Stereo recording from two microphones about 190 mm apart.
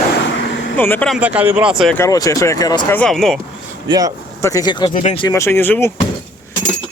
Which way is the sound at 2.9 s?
5° left (ahead or behind).